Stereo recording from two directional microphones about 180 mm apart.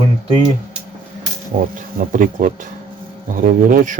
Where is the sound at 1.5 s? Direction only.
45° right (ahead or behind).